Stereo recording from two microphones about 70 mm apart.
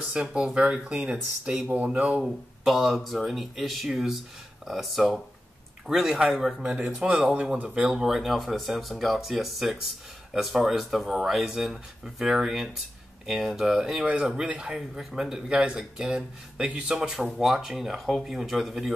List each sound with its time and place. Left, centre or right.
0.1 s speech: centre
2.2 s speech: centre